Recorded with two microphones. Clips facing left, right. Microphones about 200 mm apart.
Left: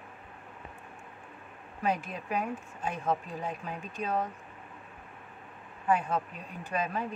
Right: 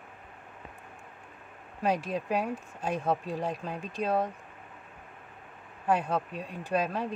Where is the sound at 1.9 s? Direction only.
35° right (ahead or behind).